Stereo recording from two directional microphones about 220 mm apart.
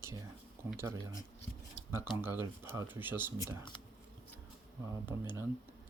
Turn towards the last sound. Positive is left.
turn(degrees=-10)  # may be behind; listen again after turning